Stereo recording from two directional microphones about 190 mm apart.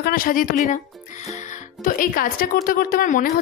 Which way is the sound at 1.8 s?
45° left (ahead or behind).